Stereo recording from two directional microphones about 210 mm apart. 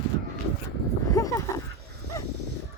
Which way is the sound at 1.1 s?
15° left (ahead or behind).